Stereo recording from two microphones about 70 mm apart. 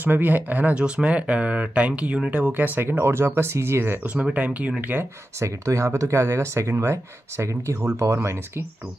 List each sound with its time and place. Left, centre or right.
0.0 s speech: right
5.4 s speech: right